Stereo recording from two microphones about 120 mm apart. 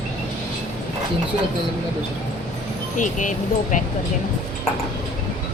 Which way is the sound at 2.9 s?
90° left.